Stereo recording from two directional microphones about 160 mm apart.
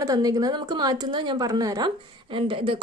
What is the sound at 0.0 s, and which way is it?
A woman's voice, 20° right (ahead or behind).